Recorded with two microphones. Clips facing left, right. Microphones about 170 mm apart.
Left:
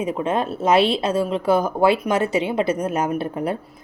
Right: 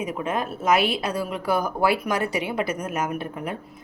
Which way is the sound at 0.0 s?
30° left (ahead or behind).